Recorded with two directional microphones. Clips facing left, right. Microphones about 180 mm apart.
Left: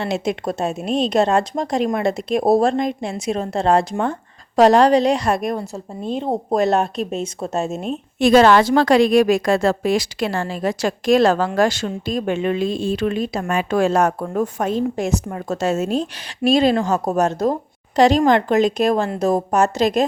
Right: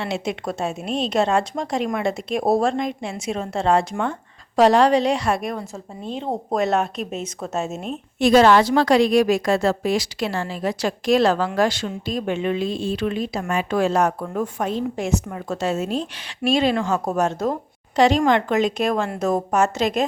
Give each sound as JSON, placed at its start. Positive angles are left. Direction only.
{"t": 0.0, "sound": "a woman's voice", "side_deg": 40}
{"t": 8.2, "sound": "a woman's voice", "side_deg": 60}